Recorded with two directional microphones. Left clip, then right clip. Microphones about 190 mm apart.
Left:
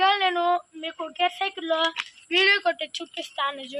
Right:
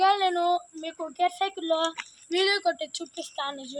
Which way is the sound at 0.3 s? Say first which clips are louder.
Left 2 dB; 25° left (ahead or behind).